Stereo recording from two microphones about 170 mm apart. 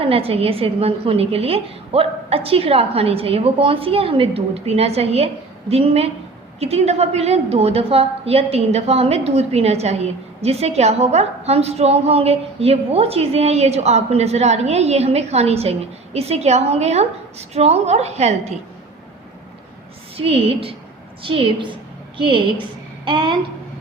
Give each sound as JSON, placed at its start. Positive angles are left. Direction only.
{"t": 0.0, "sound": "a woman's voice", "side_deg": -35}
{"t": 20.1, "sound": "a woman's voice", "side_deg": -35}